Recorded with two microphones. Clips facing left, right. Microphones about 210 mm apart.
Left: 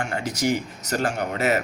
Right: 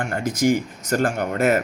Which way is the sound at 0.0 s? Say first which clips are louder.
Right 4 dB; 50° right (ahead or behind).